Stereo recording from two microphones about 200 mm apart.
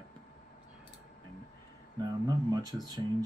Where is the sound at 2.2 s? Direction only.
20° right (ahead or behind).